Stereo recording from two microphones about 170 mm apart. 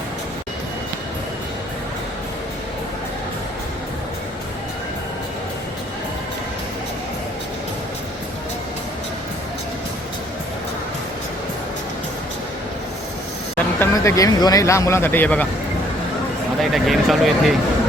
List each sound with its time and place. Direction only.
13.7 s speech: 15° left (ahead or behind)
16.6 s speech: centre (ahead or behind)